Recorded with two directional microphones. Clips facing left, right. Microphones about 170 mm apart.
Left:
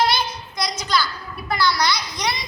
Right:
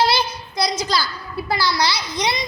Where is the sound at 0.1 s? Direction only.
30° right (ahead or behind).